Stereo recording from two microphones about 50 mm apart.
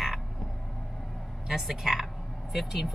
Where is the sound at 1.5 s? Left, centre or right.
Centre.